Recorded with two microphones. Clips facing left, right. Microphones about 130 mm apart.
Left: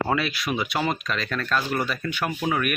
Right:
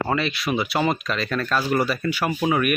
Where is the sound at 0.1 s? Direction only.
Centre (ahead or behind).